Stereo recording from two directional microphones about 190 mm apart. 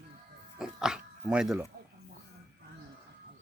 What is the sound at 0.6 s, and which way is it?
Dog, 5° right (ahead or behind).